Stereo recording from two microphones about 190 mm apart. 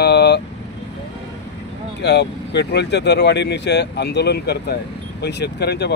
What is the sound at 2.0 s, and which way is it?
Speech, 60° left (ahead or behind).